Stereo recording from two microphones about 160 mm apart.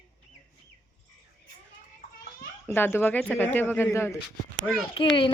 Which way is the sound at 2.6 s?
15° left (ahead or behind).